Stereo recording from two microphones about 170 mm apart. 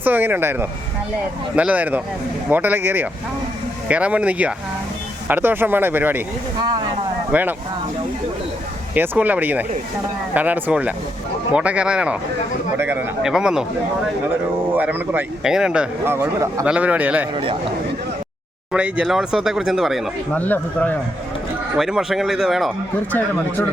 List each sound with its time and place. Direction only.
0.0 s speech: 10° right (ahead or behind)
7.3 s speech: 10° right (ahead or behind)
9.0 s speech: 10° right (ahead or behind)
14.7 s speech: 10° right (ahead or behind)
17.3 s speech: 30° right (ahead or behind)
18.7 s speech: 5° right (ahead or behind)
20.3 s speech: 10° left (ahead or behind)
21.8 s speech: centre (ahead or behind)